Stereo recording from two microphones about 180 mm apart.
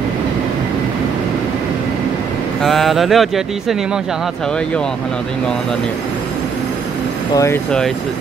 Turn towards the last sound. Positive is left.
turn(degrees=5)  # may be behind; listen again after turning